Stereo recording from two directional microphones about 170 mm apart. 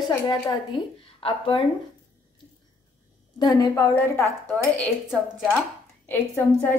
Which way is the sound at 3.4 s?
20° left (ahead or behind).